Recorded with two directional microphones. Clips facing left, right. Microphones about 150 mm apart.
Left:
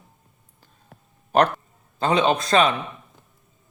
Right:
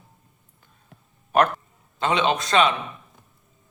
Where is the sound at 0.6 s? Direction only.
35° left (ahead or behind).